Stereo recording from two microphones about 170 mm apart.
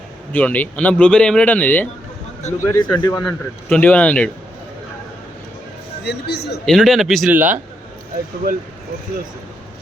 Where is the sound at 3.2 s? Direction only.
5° left (ahead or behind).